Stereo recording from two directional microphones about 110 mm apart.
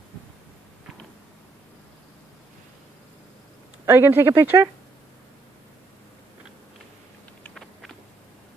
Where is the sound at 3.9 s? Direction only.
20° right (ahead or behind).